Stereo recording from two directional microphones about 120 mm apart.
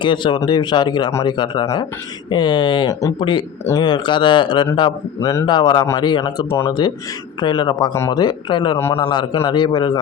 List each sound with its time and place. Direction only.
0.0 s speech: 40° left (ahead or behind)
5.2 s a man's voice: 25° left (ahead or behind)
5.5 s speech: 40° left (ahead or behind)
8.8 s a man's voice: 25° left (ahead or behind)
9.5 s speech: 40° left (ahead or behind)